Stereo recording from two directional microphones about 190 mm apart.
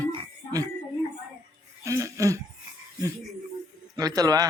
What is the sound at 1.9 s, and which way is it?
Speech, 15° right (ahead or behind).